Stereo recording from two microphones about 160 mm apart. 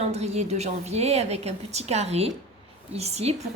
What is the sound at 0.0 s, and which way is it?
A woman's voice, 40° right (ahead or behind).